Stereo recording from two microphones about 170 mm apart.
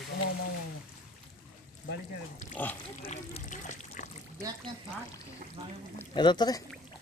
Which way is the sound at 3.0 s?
40° left (ahead or behind).